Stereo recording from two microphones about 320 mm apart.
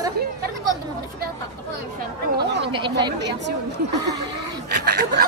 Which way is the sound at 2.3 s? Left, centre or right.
Right.